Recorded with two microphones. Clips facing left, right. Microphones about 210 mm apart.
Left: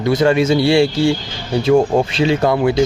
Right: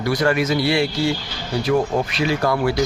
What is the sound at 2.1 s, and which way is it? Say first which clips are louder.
Speech: left 3 dB; 25° left (ahead or behind).